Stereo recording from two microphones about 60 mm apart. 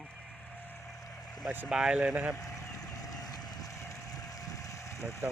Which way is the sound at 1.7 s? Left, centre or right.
Centre.